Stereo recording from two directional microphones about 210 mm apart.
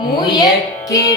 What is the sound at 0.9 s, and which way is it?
Music, 15° left (ahead or behind).